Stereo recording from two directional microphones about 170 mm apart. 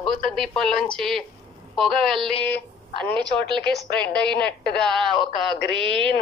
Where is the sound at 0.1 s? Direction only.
Centre (ahead or behind).